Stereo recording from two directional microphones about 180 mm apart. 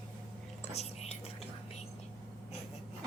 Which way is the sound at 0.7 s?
35° left (ahead or behind).